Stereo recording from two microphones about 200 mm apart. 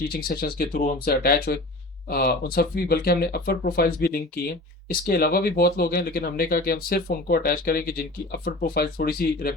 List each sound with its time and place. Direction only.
0.1 s speech: 45° left (ahead or behind)